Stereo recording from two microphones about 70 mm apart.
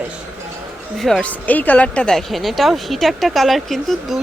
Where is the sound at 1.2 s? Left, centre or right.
Left.